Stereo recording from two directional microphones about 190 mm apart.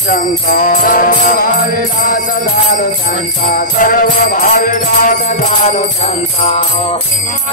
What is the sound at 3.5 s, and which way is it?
Music, 45° left (ahead or behind).